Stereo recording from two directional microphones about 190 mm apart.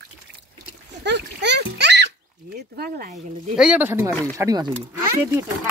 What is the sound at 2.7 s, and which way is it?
Speech, 55° right (ahead or behind).